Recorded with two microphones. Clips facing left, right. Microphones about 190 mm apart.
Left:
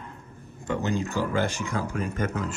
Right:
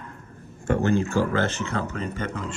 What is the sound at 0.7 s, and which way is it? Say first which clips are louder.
Speech: right 5 dB; 15° left (ahead or behind).